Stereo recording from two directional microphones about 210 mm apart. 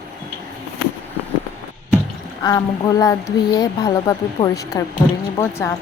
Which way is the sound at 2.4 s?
15° left (ahead or behind).